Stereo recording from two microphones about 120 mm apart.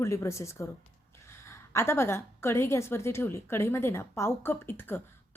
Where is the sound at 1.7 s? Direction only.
20° left (ahead or behind).